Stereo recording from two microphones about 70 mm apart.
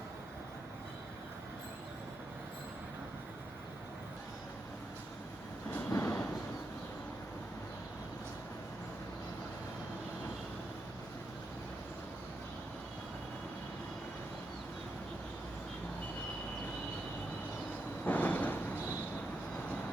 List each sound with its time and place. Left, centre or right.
5.9 s vehicle: left
18.0 s vehicle: left